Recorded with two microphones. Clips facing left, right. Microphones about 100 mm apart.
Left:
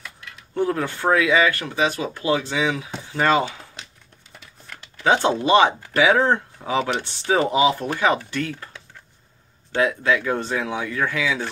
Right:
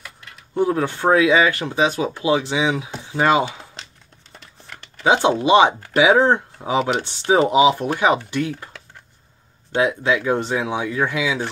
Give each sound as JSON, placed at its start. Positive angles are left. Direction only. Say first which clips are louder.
{"t": 0.6, "sound": "speech", "louder": "right 3 dB", "side_deg": -15}
{"t": 4.6, "sound": "speech", "louder": "right 2 dB", "side_deg": -15}
{"t": 9.8, "sound": "speech", "louder": "right 1 dB", "side_deg": -20}